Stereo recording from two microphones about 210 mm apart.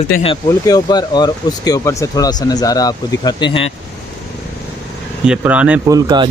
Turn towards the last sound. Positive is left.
turn(degrees=-20)  # may be behind; listen again after turning